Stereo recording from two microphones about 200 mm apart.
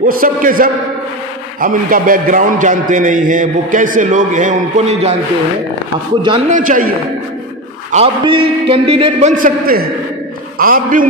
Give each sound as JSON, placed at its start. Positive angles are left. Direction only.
{"t": 0.0, "sound": "a man's voice", "side_deg": -45}
{"t": 6.5, "sound": "a man's voice", "side_deg": -40}
{"t": 7.9, "sound": "a man's voice", "side_deg": -30}
{"t": 9.3, "sound": "a man's voice", "side_deg": -45}